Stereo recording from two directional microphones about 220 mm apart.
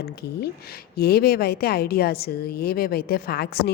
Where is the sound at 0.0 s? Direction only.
45° left (ahead or behind).